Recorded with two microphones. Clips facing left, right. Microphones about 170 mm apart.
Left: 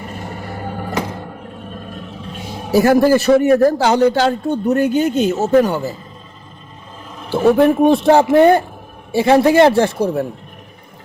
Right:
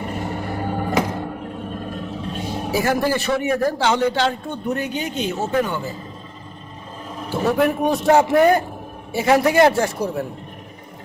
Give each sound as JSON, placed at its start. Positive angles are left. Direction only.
{"t": 2.7, "sound": "a man's voice", "side_deg": 45}
{"t": 7.3, "sound": "a man's voice", "side_deg": 25}